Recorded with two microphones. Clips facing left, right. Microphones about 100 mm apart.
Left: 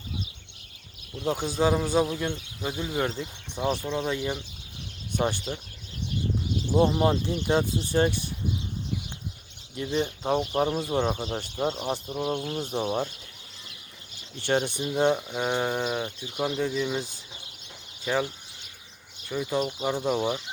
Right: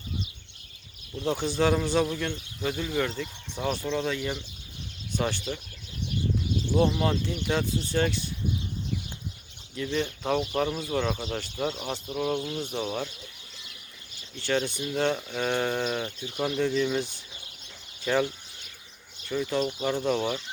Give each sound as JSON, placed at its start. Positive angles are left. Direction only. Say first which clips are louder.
{"t": 1.2, "sound": "speech", "louder": "even", "side_deg": 10}
{"t": 6.7, "sound": "speech", "louder": "left 3 dB", "side_deg": 25}
{"t": 9.7, "sound": "speech", "louder": "left 1 dB", "side_deg": 25}
{"t": 12.7, "sound": "speech", "louder": "left 3 dB", "side_deg": 35}
{"t": 14.4, "sound": "speech", "louder": "left 2 dB", "side_deg": 20}
{"t": 19.3, "sound": "speech", "louder": "even", "side_deg": 10}